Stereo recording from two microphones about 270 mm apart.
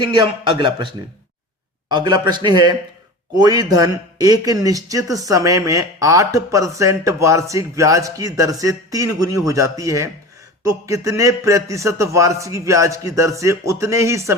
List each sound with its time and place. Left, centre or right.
0.0 s speech: centre
1.9 s speech: centre